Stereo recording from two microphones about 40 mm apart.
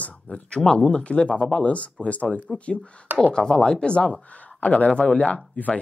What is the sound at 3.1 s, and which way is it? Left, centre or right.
Speech, centre.